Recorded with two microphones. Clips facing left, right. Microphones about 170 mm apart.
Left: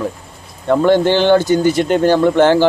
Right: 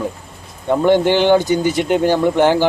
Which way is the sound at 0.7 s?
15° right (ahead or behind).